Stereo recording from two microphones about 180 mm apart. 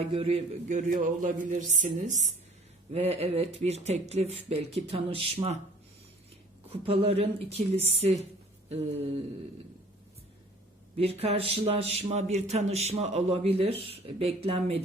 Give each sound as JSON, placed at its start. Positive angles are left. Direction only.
{"t": 0.0, "sound": "a man's voice", "side_deg": -30}
{"t": 6.7, "sound": "a man's voice", "side_deg": -30}
{"t": 10.9, "sound": "a man's voice", "side_deg": -35}